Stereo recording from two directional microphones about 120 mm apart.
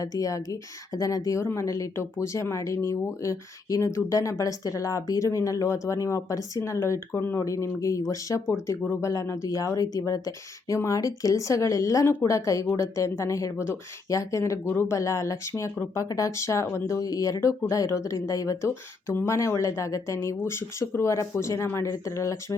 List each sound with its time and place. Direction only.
0.0 s speech: 30° left (ahead or behind)